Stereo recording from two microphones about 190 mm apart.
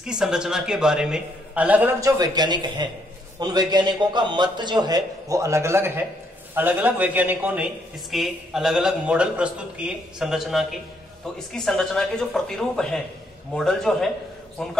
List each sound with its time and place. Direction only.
0.0 s a man's voice: 5° right (ahead or behind)